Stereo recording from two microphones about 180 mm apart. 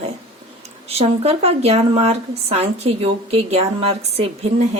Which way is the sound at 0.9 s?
35° right (ahead or behind).